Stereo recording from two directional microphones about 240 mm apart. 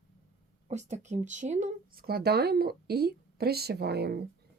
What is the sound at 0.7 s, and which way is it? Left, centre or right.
Speech, right.